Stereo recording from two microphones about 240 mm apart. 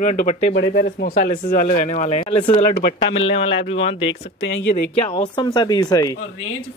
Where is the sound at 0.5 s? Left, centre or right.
Left.